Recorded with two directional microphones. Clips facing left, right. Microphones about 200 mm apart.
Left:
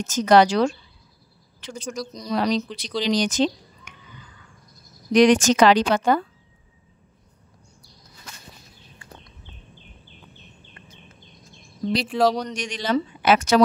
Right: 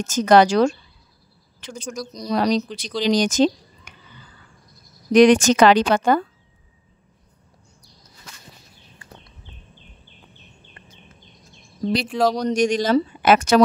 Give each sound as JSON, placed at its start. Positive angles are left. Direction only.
{"t": 0.0, "sound": "speech", "side_deg": -50}
{"t": 3.0, "sound": "a sound", "side_deg": -45}
{"t": 5.1, "sound": "speech", "side_deg": -55}
{"t": 12.0, "sound": "speech", "side_deg": 0}
{"t": 12.4, "sound": "speech", "side_deg": -40}